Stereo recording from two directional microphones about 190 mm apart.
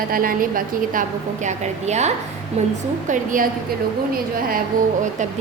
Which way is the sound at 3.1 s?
45° right (ahead or behind).